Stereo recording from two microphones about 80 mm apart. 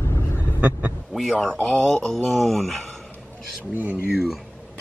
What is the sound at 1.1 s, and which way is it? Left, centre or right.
Speech, centre.